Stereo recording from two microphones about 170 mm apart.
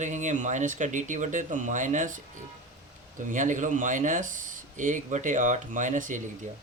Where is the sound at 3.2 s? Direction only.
50° right (ahead or behind).